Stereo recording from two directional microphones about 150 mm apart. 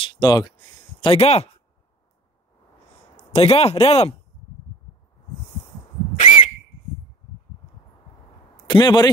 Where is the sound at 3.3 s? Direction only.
40° left (ahead or behind).